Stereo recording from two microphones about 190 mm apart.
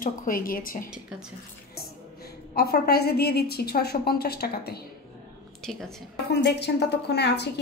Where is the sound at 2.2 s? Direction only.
55° left (ahead or behind).